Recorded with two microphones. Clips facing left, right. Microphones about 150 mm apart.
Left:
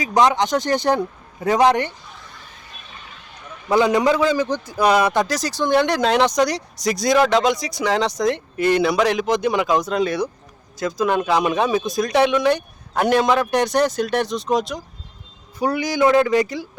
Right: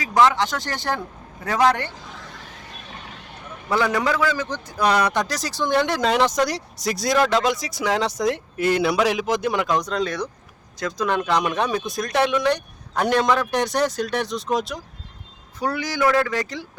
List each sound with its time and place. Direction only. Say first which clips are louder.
0.0 s speech: left 1 dB; 20° left (ahead or behind)
2.0 s a sound: right 3 dB; 90° right
2.8 s vehicle: right 3 dB; 75° right (ahead or behind)
3.7 s a man's voice: left 5 dB; 20° left (ahead or behind); by 14.8 s centre (ahead or behind)
15.5 s a man's voice: left 4 dB; 15° left (ahead or behind)